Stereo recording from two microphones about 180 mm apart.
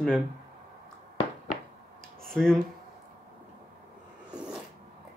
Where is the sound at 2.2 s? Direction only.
5° left (ahead or behind).